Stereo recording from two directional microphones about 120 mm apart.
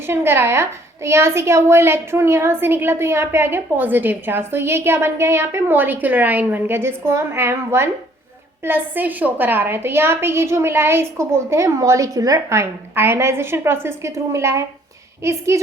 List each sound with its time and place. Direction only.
0.1 s a woman's voice: 20° right (ahead or behind)